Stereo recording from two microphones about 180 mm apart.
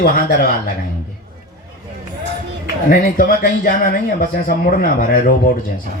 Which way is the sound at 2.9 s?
55° left (ahead or behind).